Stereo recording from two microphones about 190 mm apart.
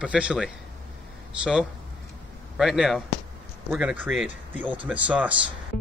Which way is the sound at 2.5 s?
5° right (ahead or behind).